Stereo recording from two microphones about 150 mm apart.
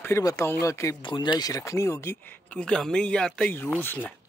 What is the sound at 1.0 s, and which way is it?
Speech, 30° left (ahead or behind).